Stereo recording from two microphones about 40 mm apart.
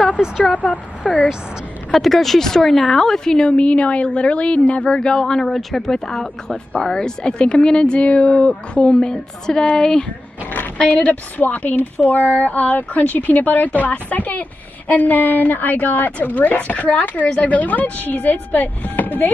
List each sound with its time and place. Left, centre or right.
0.5 s a woman's voice: left
1.9 s speech: centre
3.4 s a woman's voice: left
4.8 s a woman's voice: left
6.5 s a woman's voice: left
9.1 s speech: centre
9.7 s a woman's voice: left